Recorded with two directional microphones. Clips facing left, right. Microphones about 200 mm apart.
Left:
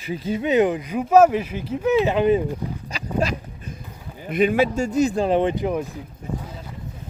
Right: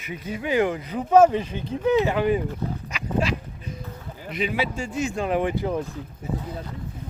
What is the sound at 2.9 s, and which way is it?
Dog, 40° left (ahead or behind).